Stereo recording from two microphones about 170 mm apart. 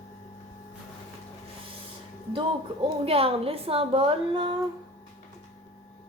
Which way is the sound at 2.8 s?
35° right (ahead or behind).